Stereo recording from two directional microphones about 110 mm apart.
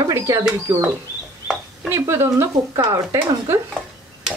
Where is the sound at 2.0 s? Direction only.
25° right (ahead or behind).